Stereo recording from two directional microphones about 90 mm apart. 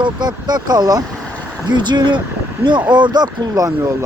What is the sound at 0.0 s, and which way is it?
Speech, 55° right (ahead or behind).